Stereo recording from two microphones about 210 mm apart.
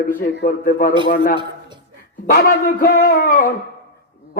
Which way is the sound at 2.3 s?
45° left (ahead or behind).